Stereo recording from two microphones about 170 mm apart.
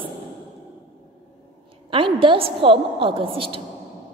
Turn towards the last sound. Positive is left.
turn(degrees=-30)  # may be behind; listen again after turning